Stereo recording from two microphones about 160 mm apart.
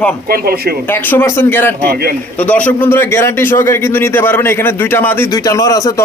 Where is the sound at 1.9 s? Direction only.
80° right.